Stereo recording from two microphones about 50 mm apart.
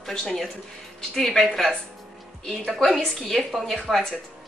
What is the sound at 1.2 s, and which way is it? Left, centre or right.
A woman's voice, centre.